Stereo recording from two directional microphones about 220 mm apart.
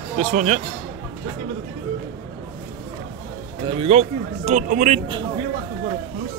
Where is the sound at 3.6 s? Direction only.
25° right (ahead or behind).